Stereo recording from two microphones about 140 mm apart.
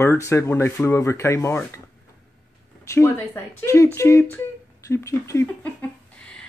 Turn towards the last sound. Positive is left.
turn(degrees=10)  # may be behind; listen again after turning